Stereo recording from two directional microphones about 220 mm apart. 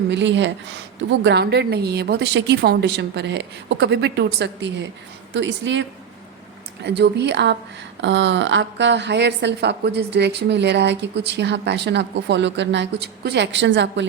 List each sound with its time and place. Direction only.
0.1 s a woman's voice: 55° right (ahead or behind)
6.8 s a woman's voice: 50° right (ahead or behind)